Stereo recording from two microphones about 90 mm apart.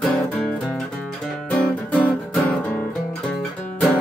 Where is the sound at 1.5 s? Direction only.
15° left (ahead or behind).